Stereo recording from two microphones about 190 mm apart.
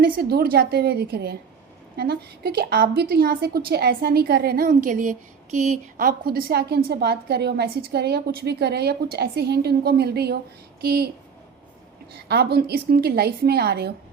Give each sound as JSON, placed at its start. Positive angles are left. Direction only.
{"t": 0.0, "sound": "a woman's voice", "side_deg": -55}
{"t": 12.3, "sound": "a woman's voice", "side_deg": -55}